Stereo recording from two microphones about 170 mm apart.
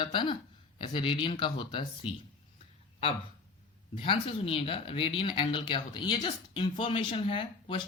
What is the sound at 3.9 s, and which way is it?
Speech, 30° left (ahead or behind).